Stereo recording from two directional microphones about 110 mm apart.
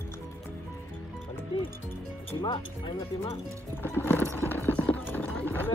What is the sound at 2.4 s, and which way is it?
Speech, 45° left (ahead or behind).